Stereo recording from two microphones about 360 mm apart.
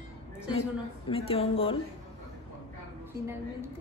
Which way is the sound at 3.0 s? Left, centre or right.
Centre.